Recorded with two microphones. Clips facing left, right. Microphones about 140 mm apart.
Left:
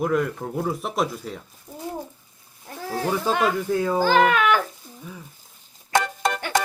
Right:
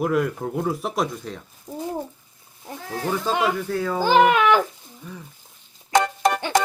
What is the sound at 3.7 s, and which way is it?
Speech, 15° left (ahead or behind).